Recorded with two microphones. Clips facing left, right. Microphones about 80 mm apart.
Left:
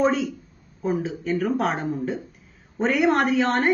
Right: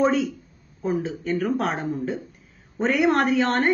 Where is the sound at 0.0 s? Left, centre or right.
Centre.